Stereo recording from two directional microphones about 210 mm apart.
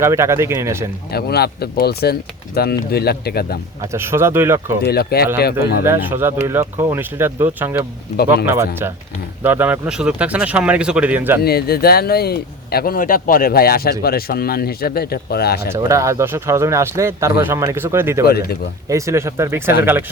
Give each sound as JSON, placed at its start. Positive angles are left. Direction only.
{"t": 0.0, "sound": "speech", "side_deg": -15}
{"t": 1.1, "sound": "speech", "side_deg": 50}
{"t": 3.8, "sound": "speech", "side_deg": -10}
{"t": 4.8, "sound": "speech", "side_deg": 50}
{"t": 5.8, "sound": "speech", "side_deg": -10}
{"t": 11.4, "sound": "speech", "side_deg": 45}
{"t": 15.7, "sound": "speech", "side_deg": -15}